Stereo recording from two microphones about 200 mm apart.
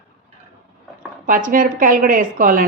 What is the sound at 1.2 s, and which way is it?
Speech, 45° right (ahead or behind).